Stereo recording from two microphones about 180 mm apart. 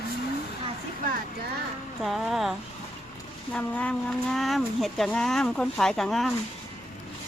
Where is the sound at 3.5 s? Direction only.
5° left (ahead or behind).